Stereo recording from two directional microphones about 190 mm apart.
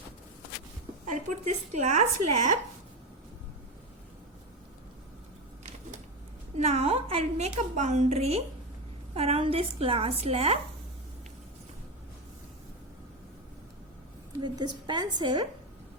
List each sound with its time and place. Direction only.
1.0 s a woman's voice: 40° right (ahead or behind)
6.6 s a woman's voice: 35° right (ahead or behind)
14.4 s a woman's voice: 25° right (ahead or behind)